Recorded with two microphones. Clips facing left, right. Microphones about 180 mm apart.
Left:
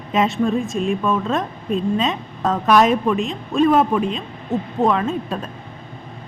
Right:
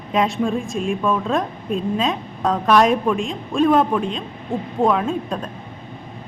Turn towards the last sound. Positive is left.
turn(degrees=0)  # may be behind; listen again after turning